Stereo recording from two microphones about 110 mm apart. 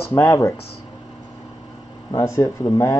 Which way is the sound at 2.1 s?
30° left (ahead or behind).